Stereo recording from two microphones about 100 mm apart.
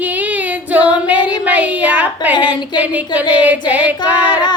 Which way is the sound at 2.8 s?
15° right (ahead or behind).